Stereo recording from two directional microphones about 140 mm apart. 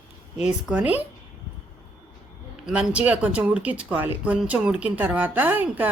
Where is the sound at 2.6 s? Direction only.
5° right (ahead or behind).